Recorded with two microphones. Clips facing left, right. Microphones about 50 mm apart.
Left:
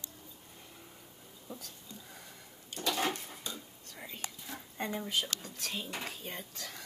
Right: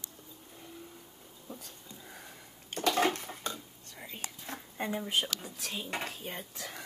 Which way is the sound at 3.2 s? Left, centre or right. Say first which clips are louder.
Right 5 dB; right.